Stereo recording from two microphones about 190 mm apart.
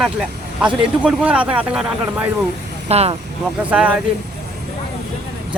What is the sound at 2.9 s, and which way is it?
Speech, 35° right (ahead or behind).